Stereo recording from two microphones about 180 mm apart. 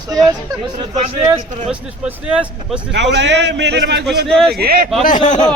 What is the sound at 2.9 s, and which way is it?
A man's voice, 75° right (ahead or behind).